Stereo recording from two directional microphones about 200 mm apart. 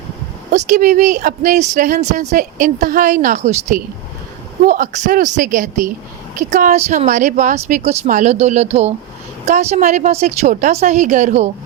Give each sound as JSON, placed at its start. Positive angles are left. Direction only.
{"t": 0.5, "sound": "speech", "side_deg": -40}